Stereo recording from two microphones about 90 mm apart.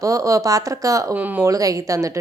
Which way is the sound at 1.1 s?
20° right (ahead or behind).